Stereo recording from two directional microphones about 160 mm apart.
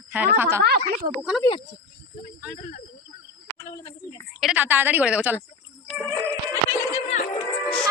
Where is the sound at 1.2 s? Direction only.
5° right (ahead or behind).